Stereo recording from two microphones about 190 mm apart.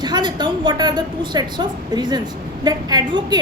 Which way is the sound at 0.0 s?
25° right (ahead or behind).